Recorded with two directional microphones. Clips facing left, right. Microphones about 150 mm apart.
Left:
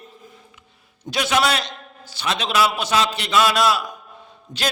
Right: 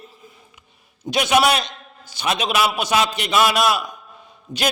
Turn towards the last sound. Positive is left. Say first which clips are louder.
# right 5 dB
turn(degrees=-30)  # may be behind; listen again after turning